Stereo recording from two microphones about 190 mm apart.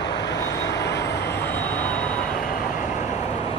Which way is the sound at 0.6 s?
65° left (ahead or behind).